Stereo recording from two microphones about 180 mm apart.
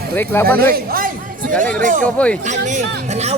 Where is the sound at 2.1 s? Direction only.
5° left (ahead or behind).